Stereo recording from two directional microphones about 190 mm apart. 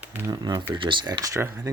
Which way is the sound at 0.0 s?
10° right (ahead or behind).